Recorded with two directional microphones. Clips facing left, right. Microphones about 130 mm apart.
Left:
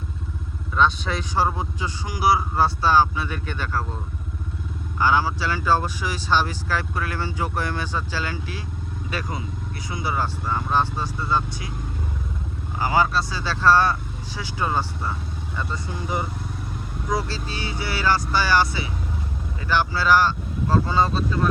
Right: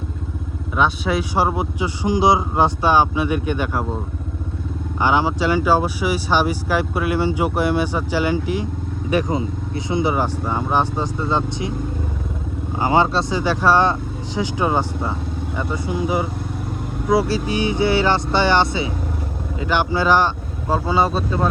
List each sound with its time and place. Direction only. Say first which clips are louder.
0.8 s speech: right 3 dB; 10° right (ahead or behind)
12.8 s speech: right 4 dB; 25° right (ahead or behind)